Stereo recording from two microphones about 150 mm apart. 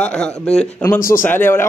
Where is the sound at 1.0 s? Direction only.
70° left (ahead or behind).